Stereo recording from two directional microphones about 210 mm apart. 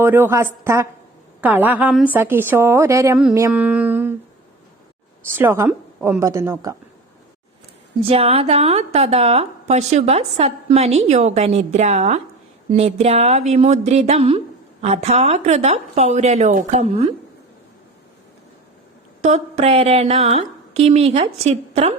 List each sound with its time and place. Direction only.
0.0 s a woman's voice: 10° right (ahead or behind)
5.3 s a woman's voice: 10° right (ahead or behind)
8.0 s a woman's voice: 30° right (ahead or behind)
19.2 s a woman's voice: 35° right (ahead or behind)